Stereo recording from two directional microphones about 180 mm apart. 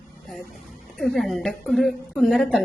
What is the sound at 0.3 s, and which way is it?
A woman's voice, centre (ahead or behind).